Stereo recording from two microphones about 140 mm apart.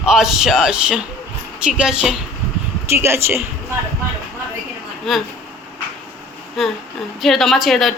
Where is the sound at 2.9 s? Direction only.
20° right (ahead or behind).